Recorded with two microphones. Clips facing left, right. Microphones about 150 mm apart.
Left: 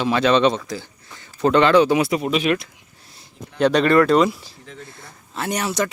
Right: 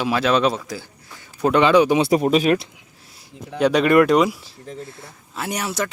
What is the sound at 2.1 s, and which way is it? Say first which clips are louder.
Speech: right 4 dB; 40° right (ahead or behind).